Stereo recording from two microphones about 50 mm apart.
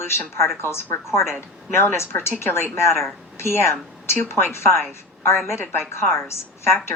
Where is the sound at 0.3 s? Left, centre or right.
Left.